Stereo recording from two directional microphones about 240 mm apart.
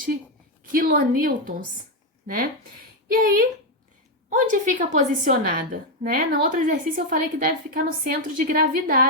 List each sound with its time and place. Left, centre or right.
0.6 s a woman's voice: right